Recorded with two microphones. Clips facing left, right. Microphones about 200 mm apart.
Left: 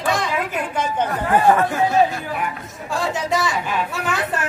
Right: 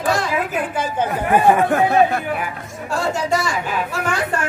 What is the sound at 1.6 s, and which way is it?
Speech, 60° right (ahead or behind).